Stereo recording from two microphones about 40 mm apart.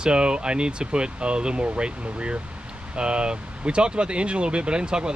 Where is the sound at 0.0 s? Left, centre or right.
Right.